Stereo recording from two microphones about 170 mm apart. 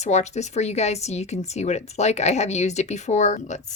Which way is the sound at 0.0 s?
40° left (ahead or behind).